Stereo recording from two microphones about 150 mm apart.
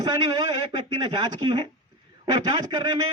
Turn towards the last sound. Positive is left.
turn(degrees=-30)  # may be behind; listen again after turning